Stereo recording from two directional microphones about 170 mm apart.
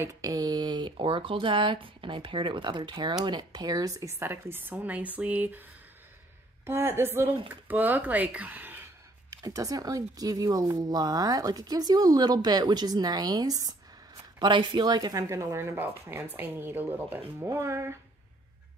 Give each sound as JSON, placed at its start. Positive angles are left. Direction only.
{"t": 0.0, "sound": "speech", "side_deg": -20}
{"t": 6.6, "sound": "speech", "side_deg": -15}